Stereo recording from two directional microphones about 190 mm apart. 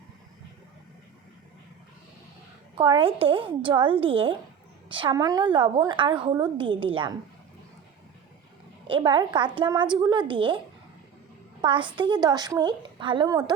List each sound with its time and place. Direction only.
2.7 s a woman's voice: 25° right (ahead or behind)
8.9 s a woman's voice: 25° right (ahead or behind)
11.6 s a woman's voice: 25° right (ahead or behind)